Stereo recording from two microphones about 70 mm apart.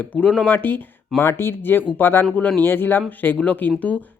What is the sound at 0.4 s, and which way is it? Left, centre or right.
Speech, left.